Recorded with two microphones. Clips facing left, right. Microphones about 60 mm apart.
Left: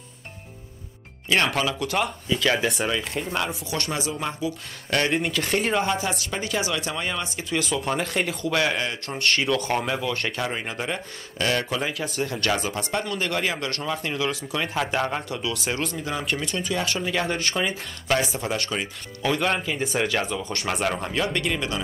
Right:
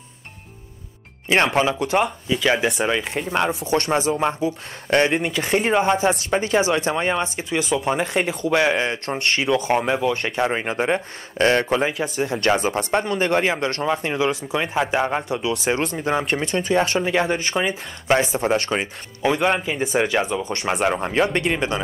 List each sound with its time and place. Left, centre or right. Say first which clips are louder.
1.3 s speech: right 5 dB; right
5.9 s speech: right 7 dB; right
17.0 s speech: right 5 dB; right
19.2 s speech: right 4 dB; centre